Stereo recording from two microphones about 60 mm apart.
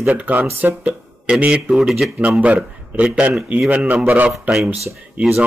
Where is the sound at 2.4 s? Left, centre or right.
Right.